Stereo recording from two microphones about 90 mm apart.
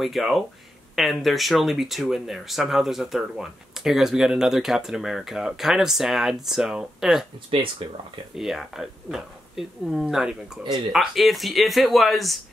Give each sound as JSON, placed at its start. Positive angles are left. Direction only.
{"t": 0.0, "sound": "speech", "side_deg": 0}
{"t": 8.4, "sound": "speech", "side_deg": 0}
{"t": 10.6, "sound": "speech", "side_deg": -60}
{"t": 10.9, "sound": "speech", "side_deg": 0}